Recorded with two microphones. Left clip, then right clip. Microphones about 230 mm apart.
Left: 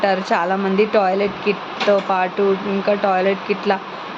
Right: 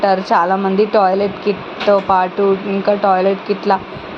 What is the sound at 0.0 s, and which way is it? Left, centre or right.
A woman's voice, centre.